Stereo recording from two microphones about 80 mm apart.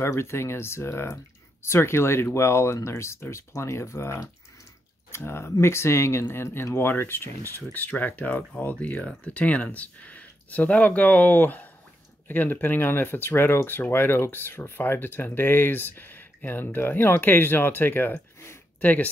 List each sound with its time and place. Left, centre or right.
0.0 s speech: left